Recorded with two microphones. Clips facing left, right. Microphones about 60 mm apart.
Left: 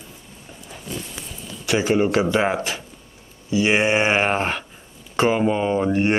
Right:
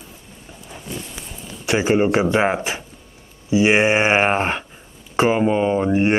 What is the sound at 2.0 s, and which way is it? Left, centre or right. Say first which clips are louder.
Speech: right 2 dB; right.